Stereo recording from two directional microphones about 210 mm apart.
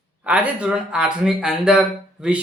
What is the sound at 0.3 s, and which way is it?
A man's voice, 5° right (ahead or behind).